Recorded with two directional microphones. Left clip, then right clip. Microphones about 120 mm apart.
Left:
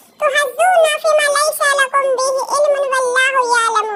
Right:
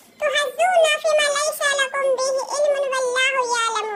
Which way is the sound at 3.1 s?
35° left (ahead or behind).